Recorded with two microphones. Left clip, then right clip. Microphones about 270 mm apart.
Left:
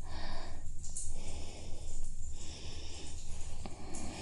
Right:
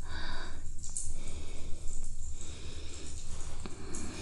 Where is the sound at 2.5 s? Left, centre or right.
Right.